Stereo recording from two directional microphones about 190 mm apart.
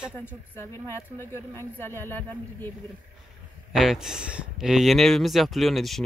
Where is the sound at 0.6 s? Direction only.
15° left (ahead or behind).